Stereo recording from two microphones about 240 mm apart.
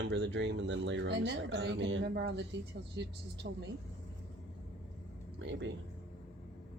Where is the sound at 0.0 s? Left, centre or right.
Right.